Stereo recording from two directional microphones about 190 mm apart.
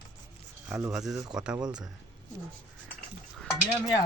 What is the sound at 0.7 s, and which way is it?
Speech, 5° right (ahead or behind).